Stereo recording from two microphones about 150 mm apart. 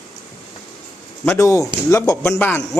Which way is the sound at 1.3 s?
20° left (ahead or behind).